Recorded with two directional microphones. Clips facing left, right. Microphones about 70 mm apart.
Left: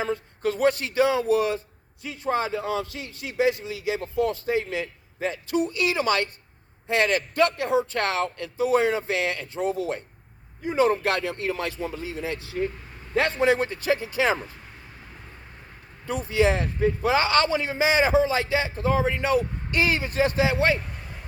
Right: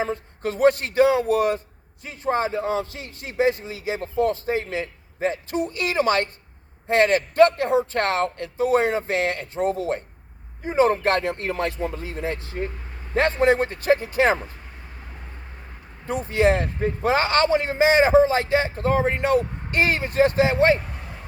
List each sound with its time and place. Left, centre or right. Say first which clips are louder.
0.0 s speech: even; right
16.1 s a man's voice: right 2 dB; right